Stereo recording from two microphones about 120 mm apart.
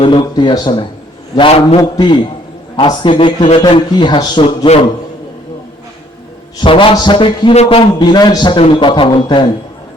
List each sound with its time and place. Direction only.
0.0 s a man's voice: 45° left (ahead or behind)
1.4 s music: 50° left (ahead or behind)
1.8 s a man's voice: 35° left (ahead or behind)
4.4 s a man's voice: 60° left (ahead or behind)
6.6 s music: 45° left (ahead or behind)
7.9 s a man's voice: 35° left (ahead or behind)